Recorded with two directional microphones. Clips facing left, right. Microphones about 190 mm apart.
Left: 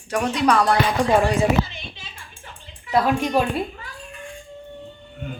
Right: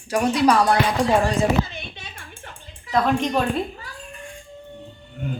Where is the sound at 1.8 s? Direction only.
60° right (ahead or behind).